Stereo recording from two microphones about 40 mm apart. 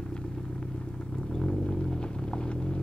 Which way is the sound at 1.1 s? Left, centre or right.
Centre.